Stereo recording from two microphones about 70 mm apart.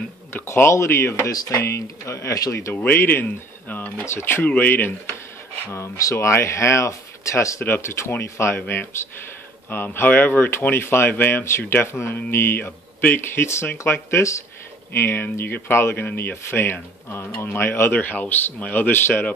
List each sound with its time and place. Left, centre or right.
0.3 s speech: left
1.3 s speech: left
1.6 s speech: left
2.7 s speech: left
5.7 s speech: left
7.6 s speech: left